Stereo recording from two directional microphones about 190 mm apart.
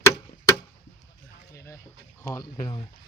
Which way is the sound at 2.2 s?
20° left (ahead or behind).